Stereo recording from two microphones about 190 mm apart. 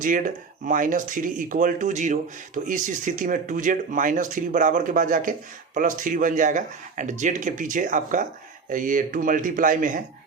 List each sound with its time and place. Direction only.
0.0 s speech: 45° right (ahead or behind)